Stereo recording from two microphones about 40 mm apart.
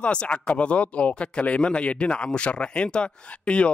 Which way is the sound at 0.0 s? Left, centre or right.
Left.